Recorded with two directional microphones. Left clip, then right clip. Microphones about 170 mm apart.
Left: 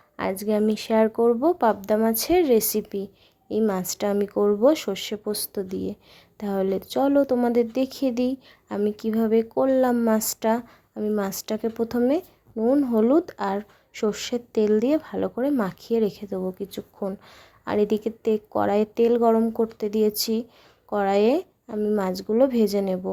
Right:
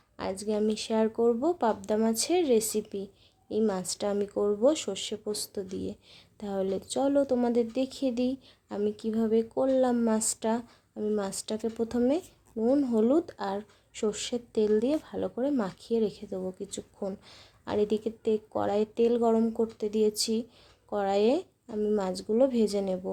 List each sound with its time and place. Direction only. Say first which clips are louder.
0.2 s speech: left 6 dB; 25° left (ahead or behind)